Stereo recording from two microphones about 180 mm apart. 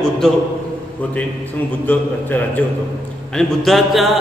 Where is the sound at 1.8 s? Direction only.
10° left (ahead or behind).